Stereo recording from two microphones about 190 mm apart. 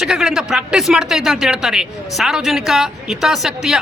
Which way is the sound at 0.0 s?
5° right (ahead or behind).